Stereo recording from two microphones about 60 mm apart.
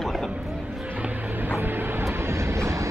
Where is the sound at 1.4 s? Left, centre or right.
Right.